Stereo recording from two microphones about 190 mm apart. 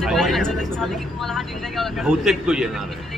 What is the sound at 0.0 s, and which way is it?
Speech, centre (ahead or behind).